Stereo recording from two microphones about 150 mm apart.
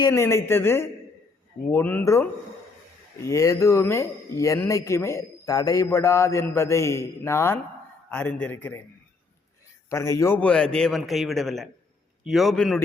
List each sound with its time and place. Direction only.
0.1 s a man's voice: 15° left (ahead or behind)
9.9 s a man's voice: 20° left (ahead or behind); by 12.8 s centre (ahead or behind)